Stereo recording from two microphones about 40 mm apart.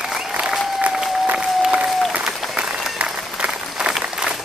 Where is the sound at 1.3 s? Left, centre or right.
Right.